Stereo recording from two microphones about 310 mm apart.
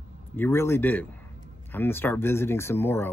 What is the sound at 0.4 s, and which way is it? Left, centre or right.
Speech, centre.